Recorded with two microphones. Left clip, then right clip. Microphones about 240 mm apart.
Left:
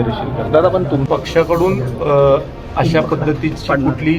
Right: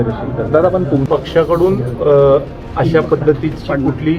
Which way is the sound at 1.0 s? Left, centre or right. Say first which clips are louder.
Right 1 dB; centre.